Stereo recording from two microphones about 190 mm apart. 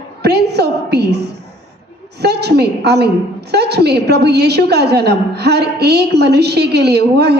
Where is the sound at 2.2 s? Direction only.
60° right (ahead or behind).